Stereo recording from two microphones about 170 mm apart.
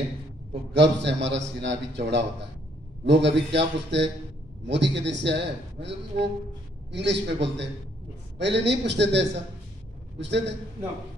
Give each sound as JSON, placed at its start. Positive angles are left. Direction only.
{"t": 0.7, "sound": "a man's voice", "side_deg": -90}